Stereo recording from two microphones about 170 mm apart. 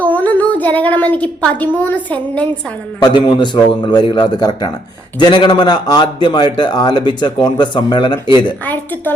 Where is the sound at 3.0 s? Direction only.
25° left (ahead or behind).